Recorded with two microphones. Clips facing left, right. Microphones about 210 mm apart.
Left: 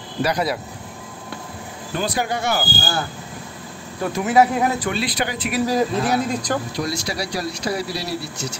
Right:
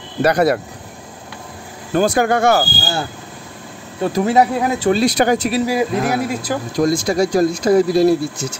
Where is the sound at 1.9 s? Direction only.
50° right (ahead or behind).